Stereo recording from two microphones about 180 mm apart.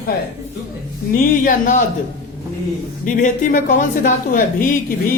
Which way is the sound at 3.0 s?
45° left (ahead or behind).